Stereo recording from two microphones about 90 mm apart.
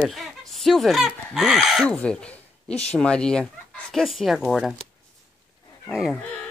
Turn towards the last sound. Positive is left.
turn(degrees=0)  # may be behind; listen again after turning